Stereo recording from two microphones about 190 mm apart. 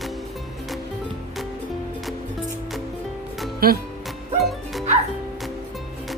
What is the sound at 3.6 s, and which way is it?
Speech, 50° right (ahead or behind).